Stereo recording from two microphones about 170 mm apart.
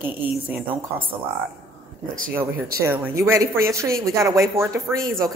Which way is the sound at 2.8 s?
15° right (ahead or behind).